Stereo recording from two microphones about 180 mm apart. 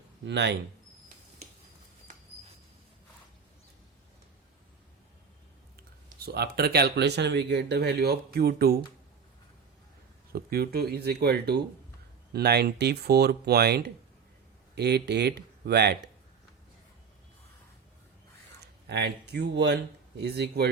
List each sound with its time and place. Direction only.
0.3 s speech: 75° right (ahead or behind)
6.2 s speech: 60° right (ahead or behind)
10.3 s speech: 60° right (ahead or behind)
18.9 s speech: 65° right (ahead or behind)